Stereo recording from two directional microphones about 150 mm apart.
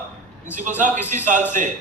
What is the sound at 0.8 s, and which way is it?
Speech, 55° right (ahead or behind).